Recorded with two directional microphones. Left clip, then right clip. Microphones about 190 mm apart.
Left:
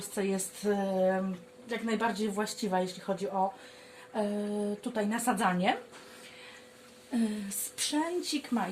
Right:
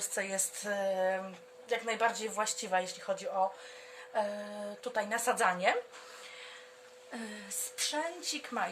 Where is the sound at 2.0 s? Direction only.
25° right (ahead or behind).